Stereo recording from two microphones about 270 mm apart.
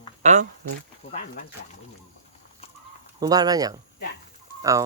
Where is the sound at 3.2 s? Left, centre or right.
Centre.